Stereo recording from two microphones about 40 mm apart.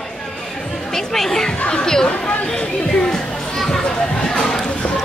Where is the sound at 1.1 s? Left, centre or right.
Centre.